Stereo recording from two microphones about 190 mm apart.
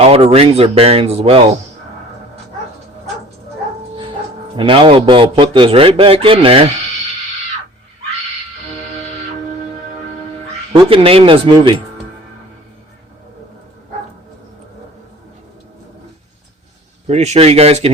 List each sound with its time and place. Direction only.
0.0 s speech: 30° right (ahead or behind)
4.5 s a man's voice: 25° right (ahead or behind)
10.7 s a man's voice: 25° right (ahead or behind)
17.1 s speech: 35° right (ahead or behind)